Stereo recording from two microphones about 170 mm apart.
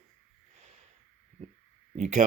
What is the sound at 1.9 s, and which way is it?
Speech, 45° right (ahead or behind).